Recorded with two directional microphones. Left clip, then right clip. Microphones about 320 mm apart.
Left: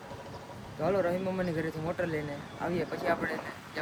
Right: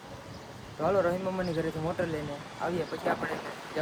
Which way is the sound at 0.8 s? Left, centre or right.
Centre.